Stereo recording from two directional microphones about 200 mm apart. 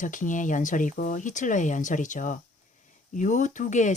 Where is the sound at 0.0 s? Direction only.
40° left (ahead or behind).